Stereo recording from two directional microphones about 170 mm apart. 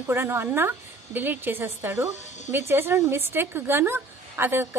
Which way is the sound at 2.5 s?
15° right (ahead or behind).